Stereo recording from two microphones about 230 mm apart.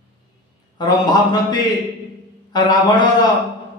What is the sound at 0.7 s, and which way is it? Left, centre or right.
A man's voice, centre.